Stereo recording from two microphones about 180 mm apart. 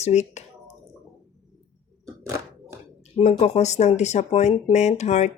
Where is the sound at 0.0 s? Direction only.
40° left (ahead or behind).